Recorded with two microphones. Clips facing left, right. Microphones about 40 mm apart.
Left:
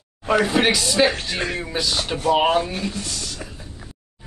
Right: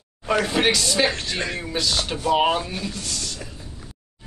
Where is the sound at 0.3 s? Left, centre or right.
Centre.